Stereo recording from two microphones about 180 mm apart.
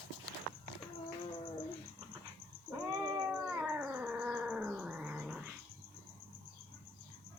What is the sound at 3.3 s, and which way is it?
Cat, 10° right (ahead or behind).